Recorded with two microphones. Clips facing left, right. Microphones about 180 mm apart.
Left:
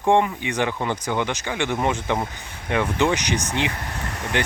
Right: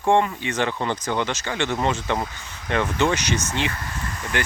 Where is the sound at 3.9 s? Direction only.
65° left (ahead or behind).